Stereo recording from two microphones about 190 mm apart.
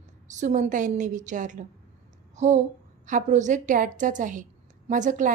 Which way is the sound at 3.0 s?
40° right (ahead or behind).